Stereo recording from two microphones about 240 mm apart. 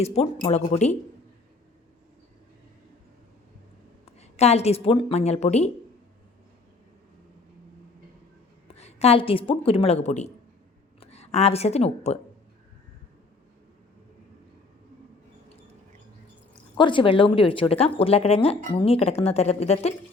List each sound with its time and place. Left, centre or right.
0.0 s speech: left
4.2 s speech: left
8.6 s a woman's voice: left
16.7 s speech: centre